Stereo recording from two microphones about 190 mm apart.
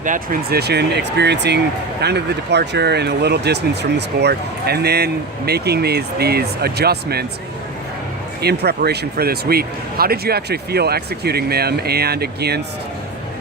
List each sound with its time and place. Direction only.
0.0 s speech: 45° right (ahead or behind)
8.4 s speech: 55° right (ahead or behind)